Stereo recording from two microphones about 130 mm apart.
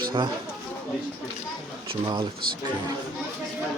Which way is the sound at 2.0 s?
35° right (ahead or behind).